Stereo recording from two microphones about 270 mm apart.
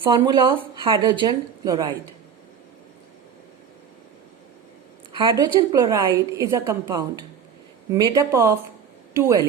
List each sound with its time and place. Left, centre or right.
0.0 s a woman's voice: centre
5.1 s a woman's voice: centre